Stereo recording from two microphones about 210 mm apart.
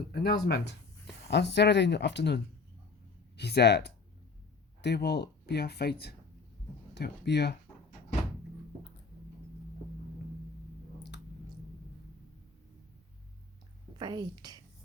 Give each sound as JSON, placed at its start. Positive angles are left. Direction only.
{"t": 0.1, "sound": "speech", "side_deg": 45}
{"t": 14.0, "sound": "a woman's voice", "side_deg": -20}